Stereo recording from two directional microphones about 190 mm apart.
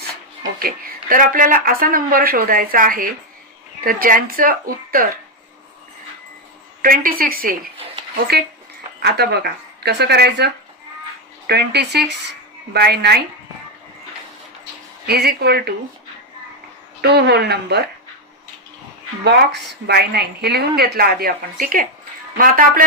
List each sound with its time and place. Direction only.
0.6 s speech: 50° right (ahead or behind)
6.8 s speech: 50° right (ahead or behind)
9.0 s speech: 55° right (ahead or behind)
15.0 s speech: 55° right (ahead or behind)
17.0 s speech: 60° right (ahead or behind)
19.2 s speech: 65° right (ahead or behind); by 22.8 s 50° right (ahead or behind)